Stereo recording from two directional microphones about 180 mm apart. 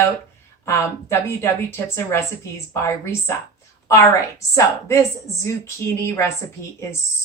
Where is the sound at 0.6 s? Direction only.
15° left (ahead or behind).